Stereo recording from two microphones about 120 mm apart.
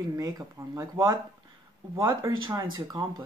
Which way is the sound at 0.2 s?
30° right (ahead or behind).